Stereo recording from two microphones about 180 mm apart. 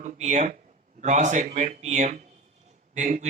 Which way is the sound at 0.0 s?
40° right (ahead or behind).